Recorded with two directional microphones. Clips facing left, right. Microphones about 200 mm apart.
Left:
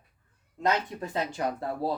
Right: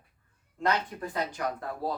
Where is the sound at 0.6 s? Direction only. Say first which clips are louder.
Left 1 dB; 25° left (ahead or behind).